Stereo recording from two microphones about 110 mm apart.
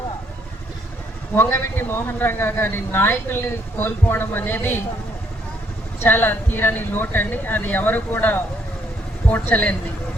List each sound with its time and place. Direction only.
1.4 s a man's voice: 20° left (ahead or behind)
6.0 s speech: 20° left (ahead or behind)